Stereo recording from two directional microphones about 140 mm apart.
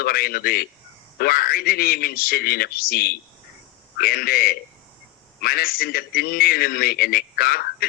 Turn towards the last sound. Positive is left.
turn(degrees=90)